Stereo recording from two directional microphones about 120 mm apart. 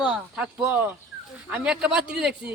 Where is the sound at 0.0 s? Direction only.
10° right (ahead or behind).